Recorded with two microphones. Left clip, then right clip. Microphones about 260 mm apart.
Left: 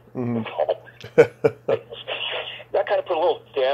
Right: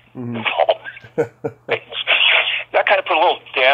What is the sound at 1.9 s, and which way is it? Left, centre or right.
Radio, centre.